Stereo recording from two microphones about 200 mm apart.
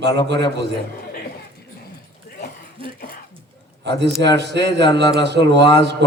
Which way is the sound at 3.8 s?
60° right (ahead or behind).